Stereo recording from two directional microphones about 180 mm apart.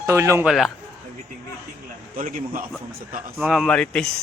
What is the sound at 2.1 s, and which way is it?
Speech, 50° right (ahead or behind).